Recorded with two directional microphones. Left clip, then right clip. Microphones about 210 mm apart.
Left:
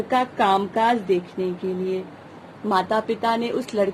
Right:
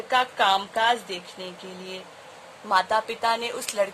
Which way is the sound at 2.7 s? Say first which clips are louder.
Left 1 dB; 25° right (ahead or behind).